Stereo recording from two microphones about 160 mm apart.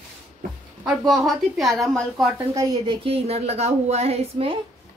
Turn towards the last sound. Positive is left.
turn(degrees=-40)  # may be behind; listen again after turning